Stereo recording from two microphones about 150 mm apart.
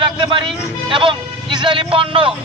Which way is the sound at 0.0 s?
35° right (ahead or behind).